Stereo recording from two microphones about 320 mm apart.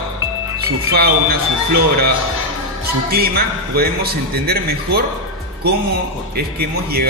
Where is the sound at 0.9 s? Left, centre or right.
Right.